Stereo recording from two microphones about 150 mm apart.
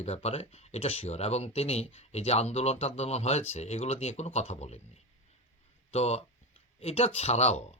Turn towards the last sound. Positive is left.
turn(degrees=45)  # may be behind; listen again after turning